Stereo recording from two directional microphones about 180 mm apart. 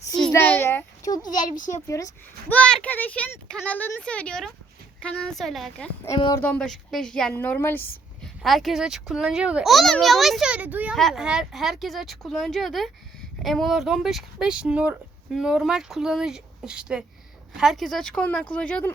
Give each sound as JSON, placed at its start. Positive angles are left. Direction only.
{"t": 0.3, "sound": "speech", "side_deg": 10}
{"t": 1.3, "sound": "speech", "side_deg": 45}
{"t": 2.5, "sound": "speech", "side_deg": 5}
{"t": 6.1, "sound": "speech", "side_deg": 20}
{"t": 6.4, "sound": "speech", "side_deg": 5}
{"t": 8.4, "sound": "speech", "side_deg": 0}